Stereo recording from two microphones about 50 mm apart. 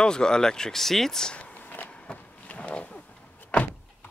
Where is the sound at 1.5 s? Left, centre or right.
Left.